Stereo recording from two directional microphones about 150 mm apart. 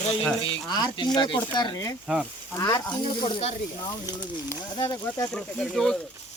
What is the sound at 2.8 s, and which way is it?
Speech, 30° left (ahead or behind).